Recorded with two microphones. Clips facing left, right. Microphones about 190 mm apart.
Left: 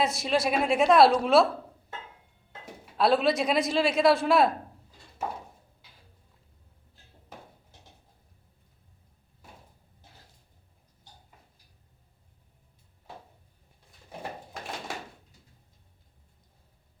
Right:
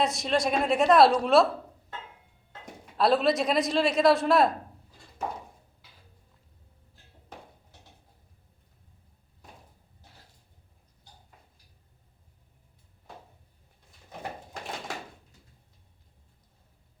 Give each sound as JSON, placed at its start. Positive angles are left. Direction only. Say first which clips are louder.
{"t": 0.0, "sound": "a man's voice", "louder": "even", "side_deg": 0}
{"t": 3.0, "sound": "a man's voice", "louder": "even", "side_deg": 0}